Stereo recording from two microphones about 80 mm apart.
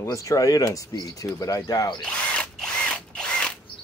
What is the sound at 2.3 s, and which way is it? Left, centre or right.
Mechanisms, centre.